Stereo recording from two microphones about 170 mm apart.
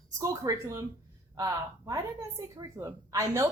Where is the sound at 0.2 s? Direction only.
20° right (ahead or behind).